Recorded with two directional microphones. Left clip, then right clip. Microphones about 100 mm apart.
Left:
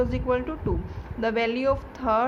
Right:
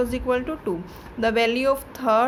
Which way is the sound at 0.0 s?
30° right (ahead or behind).